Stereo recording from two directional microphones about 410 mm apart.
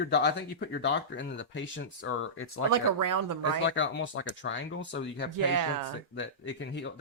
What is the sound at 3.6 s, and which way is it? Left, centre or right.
Speech, left.